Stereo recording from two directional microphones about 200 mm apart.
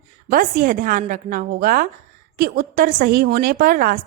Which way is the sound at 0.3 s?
45° right (ahead or behind).